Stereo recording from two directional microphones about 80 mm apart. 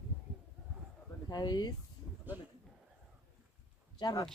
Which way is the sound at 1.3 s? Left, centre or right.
Left.